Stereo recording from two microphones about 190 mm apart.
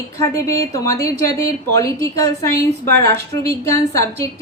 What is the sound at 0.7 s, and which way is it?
Speech, 15° left (ahead or behind).